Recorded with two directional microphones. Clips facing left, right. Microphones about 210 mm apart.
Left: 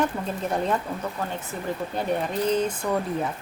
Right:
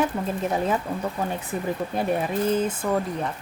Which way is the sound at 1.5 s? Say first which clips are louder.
Right 4 dB; 20° right (ahead or behind).